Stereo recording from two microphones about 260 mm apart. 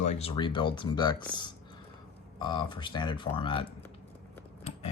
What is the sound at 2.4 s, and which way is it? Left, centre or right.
Speech, centre.